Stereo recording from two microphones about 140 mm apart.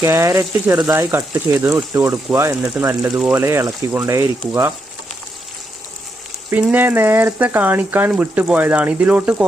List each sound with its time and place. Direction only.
0.0 s speech: 20° right (ahead or behind)
3.2 s speech: 5° right (ahead or behind)
3.4 s speech: 20° right (ahead or behind)
6.5 s speech: 10° right (ahead or behind)